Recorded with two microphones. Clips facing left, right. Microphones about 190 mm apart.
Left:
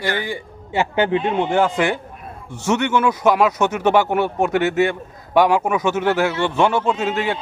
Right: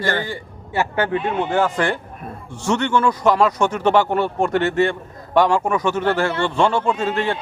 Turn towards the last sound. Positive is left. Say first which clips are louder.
# even
turn(degrees=5)  # may be behind; listen again after turning